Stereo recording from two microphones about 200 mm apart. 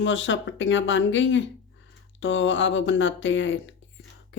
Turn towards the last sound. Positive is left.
turn(degrees=70)  # may be behind; listen again after turning